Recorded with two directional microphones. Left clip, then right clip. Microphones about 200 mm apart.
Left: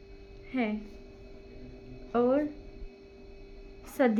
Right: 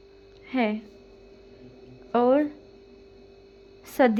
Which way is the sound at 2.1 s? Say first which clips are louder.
Right 6 dB; 35° right (ahead or behind).